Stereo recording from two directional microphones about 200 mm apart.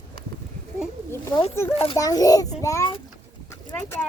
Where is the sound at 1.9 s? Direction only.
15° left (ahead or behind).